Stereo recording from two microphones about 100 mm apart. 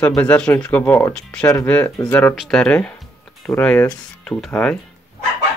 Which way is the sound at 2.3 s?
5° left (ahead or behind).